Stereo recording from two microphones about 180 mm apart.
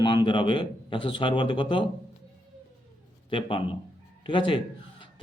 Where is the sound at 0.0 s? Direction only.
25° left (ahead or behind).